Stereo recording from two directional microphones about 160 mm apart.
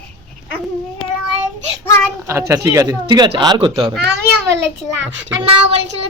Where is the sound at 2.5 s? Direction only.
20° right (ahead or behind).